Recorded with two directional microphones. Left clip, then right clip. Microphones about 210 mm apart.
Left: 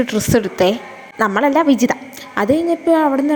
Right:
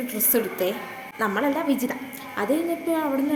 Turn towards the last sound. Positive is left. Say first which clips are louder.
# left 10 dB
turn(degrees=35)  # may be behind; listen again after turning